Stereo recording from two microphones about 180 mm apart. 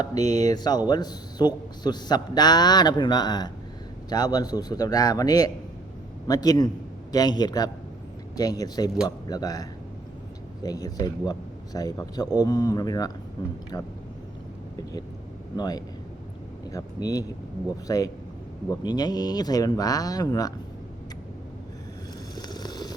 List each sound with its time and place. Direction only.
0.2 s speech: 40° right (ahead or behind)
0.4 s a man's voice: 25° left (ahead or behind)
15.5 s a man's voice: 20° left (ahead or behind)
22.4 s vehicle: 25° left (ahead or behind)